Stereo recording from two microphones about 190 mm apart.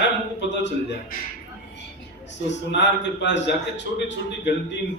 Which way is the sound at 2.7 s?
70° left (ahead or behind).